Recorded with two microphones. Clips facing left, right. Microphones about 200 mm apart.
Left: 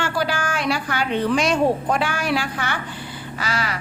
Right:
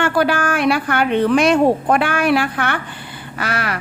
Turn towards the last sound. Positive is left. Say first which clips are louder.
# right 3 dB
turn(degrees=-60)  # may be behind; listen again after turning